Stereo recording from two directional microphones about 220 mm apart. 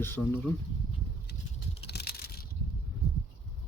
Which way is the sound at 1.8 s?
45° left (ahead or behind).